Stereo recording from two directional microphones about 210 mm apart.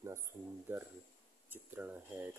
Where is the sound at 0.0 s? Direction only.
15° right (ahead or behind).